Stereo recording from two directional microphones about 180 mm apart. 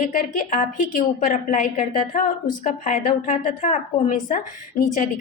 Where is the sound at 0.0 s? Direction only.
50° left (ahead or behind).